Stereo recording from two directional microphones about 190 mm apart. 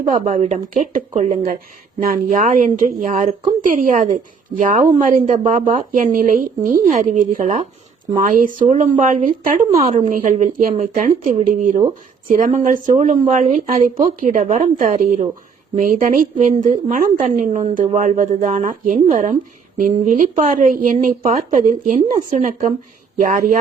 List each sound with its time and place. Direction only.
0.0 s speech: 40° right (ahead or behind)